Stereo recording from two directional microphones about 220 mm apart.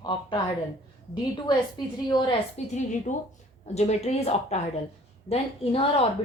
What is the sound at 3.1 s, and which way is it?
A woman's voice, 35° left (ahead or behind).